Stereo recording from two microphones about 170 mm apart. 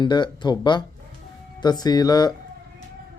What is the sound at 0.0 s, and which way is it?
Speech, 25° left (ahead or behind).